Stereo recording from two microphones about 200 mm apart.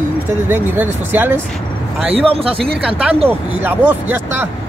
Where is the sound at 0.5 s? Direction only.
10° right (ahead or behind).